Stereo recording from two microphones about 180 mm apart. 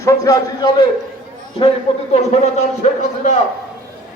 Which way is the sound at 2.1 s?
35° left (ahead or behind).